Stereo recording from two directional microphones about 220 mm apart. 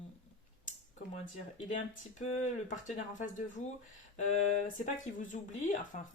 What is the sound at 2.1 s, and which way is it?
Speech, 35° left (ahead or behind).